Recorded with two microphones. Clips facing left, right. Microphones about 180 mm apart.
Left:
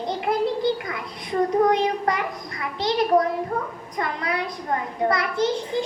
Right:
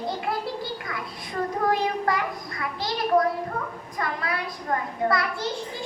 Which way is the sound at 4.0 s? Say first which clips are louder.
Left 3 dB; 20° left (ahead or behind).